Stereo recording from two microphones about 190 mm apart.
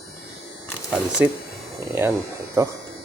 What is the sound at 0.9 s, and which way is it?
Speech, 5° right (ahead or behind).